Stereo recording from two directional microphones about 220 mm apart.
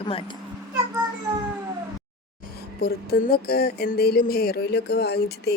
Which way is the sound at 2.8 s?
45° left (ahead or behind).